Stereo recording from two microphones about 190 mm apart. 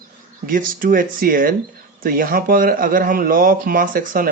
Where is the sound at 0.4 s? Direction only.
45° right (ahead or behind).